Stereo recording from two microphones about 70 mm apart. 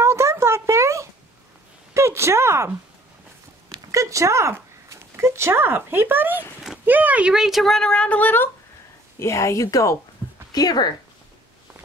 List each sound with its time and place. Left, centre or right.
0.0 s a sound: right
3.6 s speech: right
7.3 s a woman's voice: centre; by 8.5 s left
9.2 s a woman's voice: left
10.5 s speech: left